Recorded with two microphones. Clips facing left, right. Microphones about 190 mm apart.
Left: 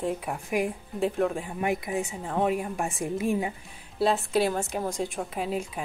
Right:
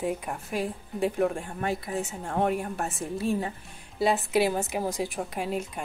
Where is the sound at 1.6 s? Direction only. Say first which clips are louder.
Left 2 dB; 15° left (ahead or behind).